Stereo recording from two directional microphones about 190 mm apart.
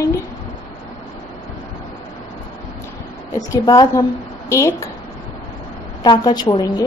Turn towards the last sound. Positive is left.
turn(degrees=25)  # may be behind; listen again after turning